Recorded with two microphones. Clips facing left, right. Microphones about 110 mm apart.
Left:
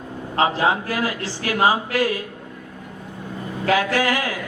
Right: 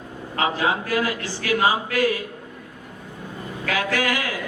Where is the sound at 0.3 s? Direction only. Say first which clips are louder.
Left 3 dB; 30° left (ahead or behind).